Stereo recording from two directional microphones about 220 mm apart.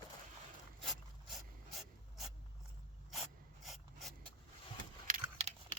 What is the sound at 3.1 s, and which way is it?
Filing, centre (ahead or behind).